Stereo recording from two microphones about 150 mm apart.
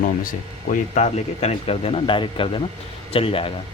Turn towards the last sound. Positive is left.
turn(degrees=40)  # may be behind; listen again after turning